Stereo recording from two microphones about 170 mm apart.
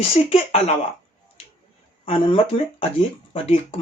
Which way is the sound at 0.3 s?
35° left (ahead or behind).